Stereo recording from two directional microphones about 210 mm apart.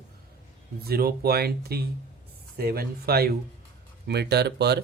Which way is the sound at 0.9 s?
45° right (ahead or behind).